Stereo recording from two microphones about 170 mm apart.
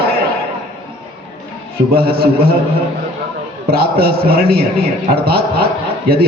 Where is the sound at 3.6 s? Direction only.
65° right (ahead or behind).